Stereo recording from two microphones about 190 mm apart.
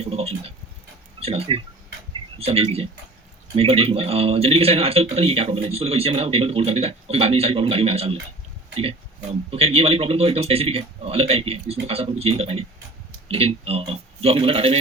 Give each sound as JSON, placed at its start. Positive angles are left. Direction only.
{"t": 0.0, "sound": "a man's voice", "side_deg": -30}